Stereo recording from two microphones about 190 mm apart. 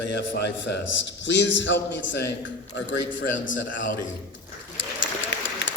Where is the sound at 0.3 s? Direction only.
60° left (ahead or behind).